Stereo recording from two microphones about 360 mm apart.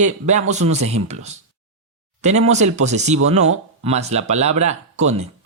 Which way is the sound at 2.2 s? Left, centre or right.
Centre.